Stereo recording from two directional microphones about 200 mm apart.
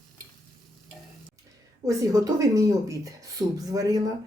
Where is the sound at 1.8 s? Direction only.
15° right (ahead or behind).